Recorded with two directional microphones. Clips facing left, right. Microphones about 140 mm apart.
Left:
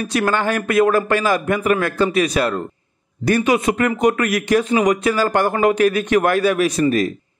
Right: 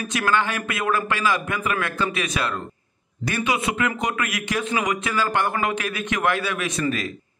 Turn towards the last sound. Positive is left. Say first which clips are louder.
# left 8 dB
turn(degrees=40)  # may be behind; listen again after turning